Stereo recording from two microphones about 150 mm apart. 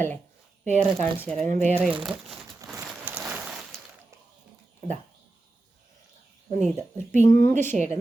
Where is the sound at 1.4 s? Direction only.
55° right (ahead or behind).